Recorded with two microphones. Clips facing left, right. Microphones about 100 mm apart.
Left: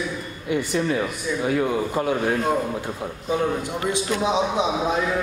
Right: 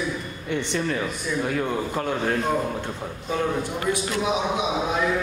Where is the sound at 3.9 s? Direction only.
25° left (ahead or behind).